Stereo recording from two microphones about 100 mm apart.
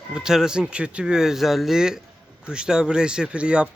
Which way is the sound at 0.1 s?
5° right (ahead or behind).